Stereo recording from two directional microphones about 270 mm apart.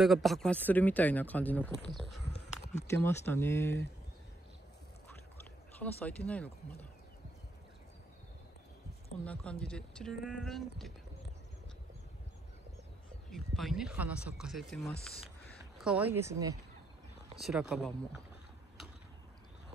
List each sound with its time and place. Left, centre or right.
0.0 s speech: centre
2.3 s a sound: left
3.0 s speech: centre
6.0 s speech: centre
9.2 s speech: centre
13.3 s speech: centre
17.4 s speech: centre